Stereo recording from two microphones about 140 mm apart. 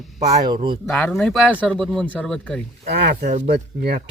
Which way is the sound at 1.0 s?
10° left (ahead or behind).